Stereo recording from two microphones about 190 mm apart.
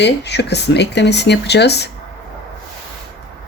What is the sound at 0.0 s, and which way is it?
Speech, 65° left (ahead or behind).